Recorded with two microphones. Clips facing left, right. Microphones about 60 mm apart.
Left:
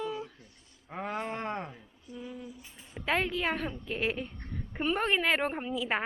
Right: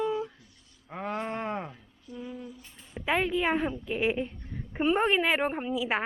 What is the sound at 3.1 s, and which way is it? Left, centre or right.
A woman's voice, centre.